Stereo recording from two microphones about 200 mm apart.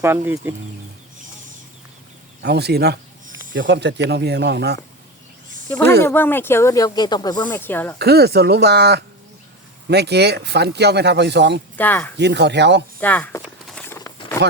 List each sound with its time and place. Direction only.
0.0 s speech: 10° right (ahead or behind)
2.4 s speech: 55° right (ahead or behind)
3.5 s speech: 65° right (ahead or behind)
6.0 s speech: 10° left (ahead or behind)
7.6 s speech: 10° left (ahead or behind)
7.9 s speech: 55° right (ahead or behind)
11.8 s speech: 10° left (ahead or behind)
12.1 s speech: 60° right (ahead or behind)
13.0 s speech: 10° left (ahead or behind)
13.4 s a sound: 5° left (ahead or behind)